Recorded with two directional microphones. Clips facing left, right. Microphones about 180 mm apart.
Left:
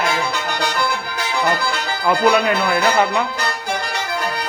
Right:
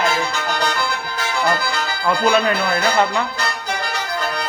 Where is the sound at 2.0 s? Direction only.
15° left (ahead or behind).